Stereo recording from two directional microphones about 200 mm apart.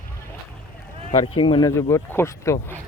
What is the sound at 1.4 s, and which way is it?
Speech, 20° left (ahead or behind).